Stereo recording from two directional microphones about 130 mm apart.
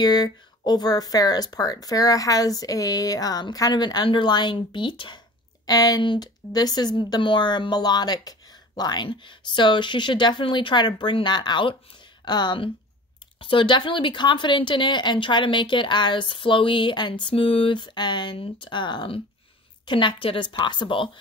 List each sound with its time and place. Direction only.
0.0 s speech: 30° left (ahead or behind)